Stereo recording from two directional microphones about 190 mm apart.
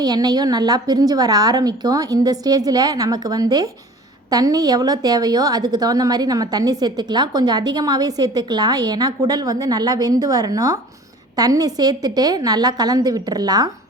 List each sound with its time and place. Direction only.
0.0 s a woman's voice: 20° right (ahead or behind)